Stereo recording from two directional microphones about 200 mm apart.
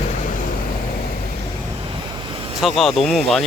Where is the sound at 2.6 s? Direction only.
Centre (ahead or behind).